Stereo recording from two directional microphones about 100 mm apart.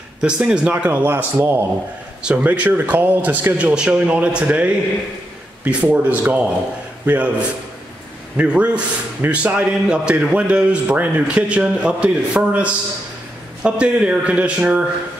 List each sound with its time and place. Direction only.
0.2 s speech: 10° right (ahead or behind)
8.4 s speech: 10° right (ahead or behind)